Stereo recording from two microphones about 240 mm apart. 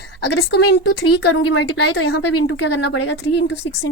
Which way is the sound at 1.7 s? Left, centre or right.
Left.